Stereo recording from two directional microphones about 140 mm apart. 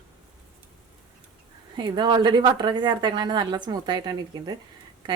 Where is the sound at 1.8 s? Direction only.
30° right (ahead or behind).